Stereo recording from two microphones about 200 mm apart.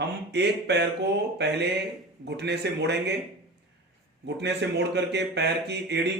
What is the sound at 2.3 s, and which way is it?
Speech, 55° right (ahead or behind).